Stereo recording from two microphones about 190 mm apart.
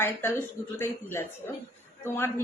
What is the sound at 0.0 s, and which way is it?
A woman's voice, 10° left (ahead or behind).